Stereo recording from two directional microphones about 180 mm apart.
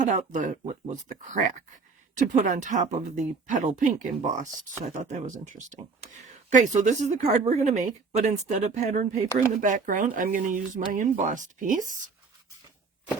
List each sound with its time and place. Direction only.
0.0 s a woman's voice: 45° right (ahead or behind)